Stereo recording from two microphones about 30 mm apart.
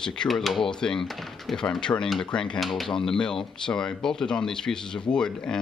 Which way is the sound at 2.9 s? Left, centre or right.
Centre.